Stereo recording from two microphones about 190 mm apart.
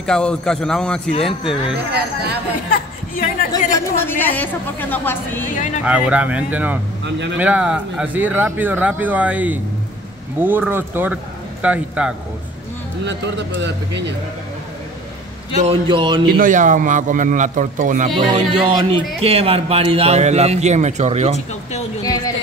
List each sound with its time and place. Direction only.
0.0 s a man's voice: 5° left (ahead or behind)
2.7 s a sound: 50° left (ahead or behind)
3.7 s a woman's voice: 10° left (ahead or behind)
5.9 s speech: 5° right (ahead or behind)
13.0 s speech: 70° right (ahead or behind)
15.6 s speech: 30° right (ahead or behind)
16.3 s a man's voice: 45° right (ahead or behind)
18.3 s a man's voice: 25° right (ahead or behind)
22.0 s speech: 20° left (ahead or behind)